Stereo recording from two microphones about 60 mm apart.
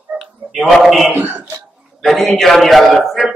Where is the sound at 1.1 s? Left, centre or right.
Right.